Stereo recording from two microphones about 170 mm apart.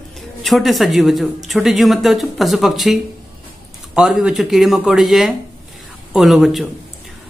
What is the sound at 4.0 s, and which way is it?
Speech, 5° right (ahead or behind).